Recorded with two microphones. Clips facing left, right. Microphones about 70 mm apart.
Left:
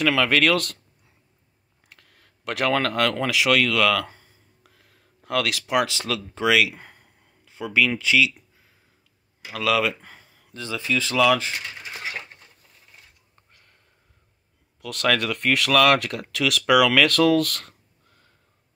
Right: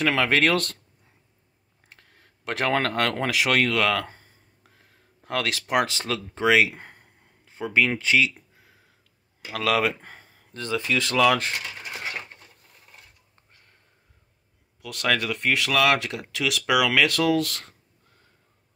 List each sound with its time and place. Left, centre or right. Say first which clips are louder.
0.0 s speech: left 1 dB; right
1.9 s speech: even; right
9.5 s speech: left 1 dB; right
10.9 s speech: left 1 dB; right
14.8 s speech: left 2 dB; centre